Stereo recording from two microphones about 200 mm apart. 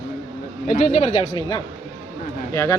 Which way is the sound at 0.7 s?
35° left (ahead or behind).